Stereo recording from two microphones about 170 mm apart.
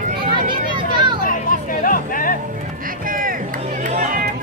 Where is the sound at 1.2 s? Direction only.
55° left (ahead or behind).